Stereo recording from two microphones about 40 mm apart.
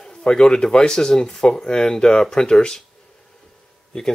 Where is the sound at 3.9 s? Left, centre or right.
Centre.